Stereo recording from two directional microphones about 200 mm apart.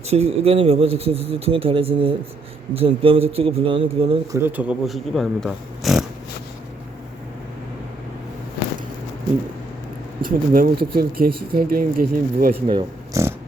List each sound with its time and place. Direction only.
0.1 s a man's voice: 30° right (ahead or behind)
4.3 s speech: 10° right (ahead or behind)
10.2 s speech: 45° right (ahead or behind)
12.6 s speech: 25° right (ahead or behind)